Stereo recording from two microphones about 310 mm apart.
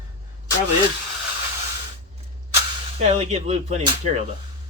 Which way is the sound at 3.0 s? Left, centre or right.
Centre.